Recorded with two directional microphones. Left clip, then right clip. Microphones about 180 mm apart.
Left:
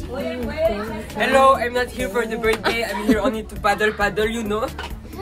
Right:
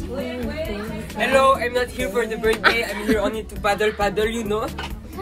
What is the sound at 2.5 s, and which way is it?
Speech, 15° left (ahead or behind).